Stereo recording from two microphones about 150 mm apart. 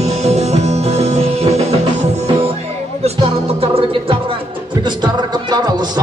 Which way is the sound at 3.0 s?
40° right (ahead or behind).